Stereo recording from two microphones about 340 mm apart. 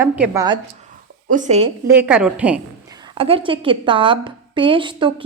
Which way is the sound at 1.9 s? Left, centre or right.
Centre.